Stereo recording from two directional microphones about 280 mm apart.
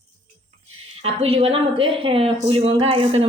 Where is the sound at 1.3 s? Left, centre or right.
Right.